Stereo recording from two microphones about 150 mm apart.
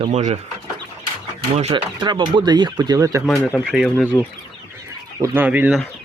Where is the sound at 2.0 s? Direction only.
30° right (ahead or behind).